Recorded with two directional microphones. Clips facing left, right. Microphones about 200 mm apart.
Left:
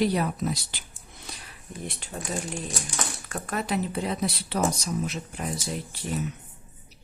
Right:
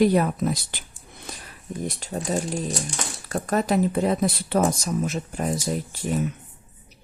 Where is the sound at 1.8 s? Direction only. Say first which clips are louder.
Right 6 dB; 40° right (ahead or behind).